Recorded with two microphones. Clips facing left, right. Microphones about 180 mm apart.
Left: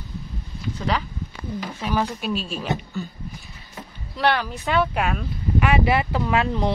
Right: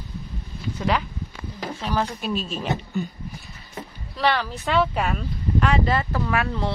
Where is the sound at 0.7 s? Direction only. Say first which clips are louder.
Right 2 dB; 5° right (ahead or behind).